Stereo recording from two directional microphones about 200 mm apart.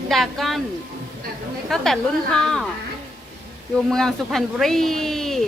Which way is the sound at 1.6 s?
Centre (ahead or behind).